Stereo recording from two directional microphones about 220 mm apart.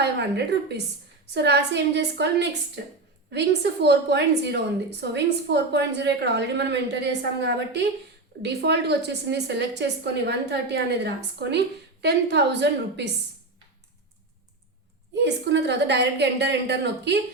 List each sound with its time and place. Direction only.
0.0 s a woman's voice: 50° right (ahead or behind)
15.1 s a woman's voice: 50° right (ahead or behind)